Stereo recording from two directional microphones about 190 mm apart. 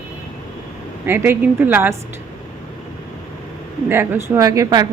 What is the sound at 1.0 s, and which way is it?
Speech, 10° right (ahead or behind).